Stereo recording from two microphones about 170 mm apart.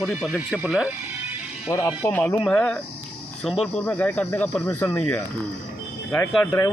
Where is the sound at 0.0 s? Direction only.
Centre (ahead or behind).